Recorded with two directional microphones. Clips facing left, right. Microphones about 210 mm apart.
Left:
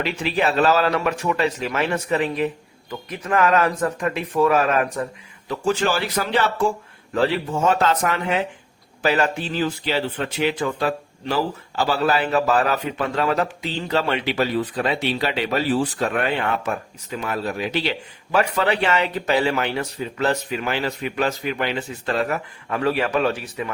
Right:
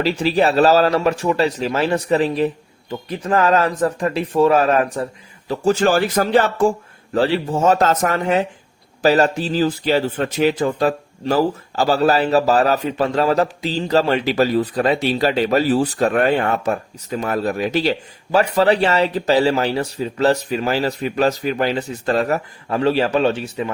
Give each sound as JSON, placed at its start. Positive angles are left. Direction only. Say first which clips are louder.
{"t": 0.0, "sound": "a man's voice", "louder": "right 5 dB", "side_deg": -35}
{"t": 7.2, "sound": "speech", "louder": "right 3 dB", "side_deg": -30}